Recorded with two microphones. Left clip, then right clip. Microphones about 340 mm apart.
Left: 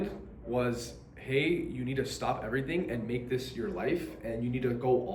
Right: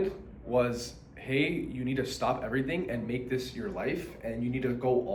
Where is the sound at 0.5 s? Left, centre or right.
Centre.